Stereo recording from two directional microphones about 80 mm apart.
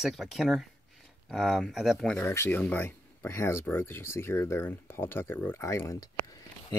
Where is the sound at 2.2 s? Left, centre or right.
Left.